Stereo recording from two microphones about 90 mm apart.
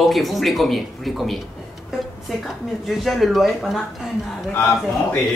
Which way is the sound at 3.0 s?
Centre (ahead or behind).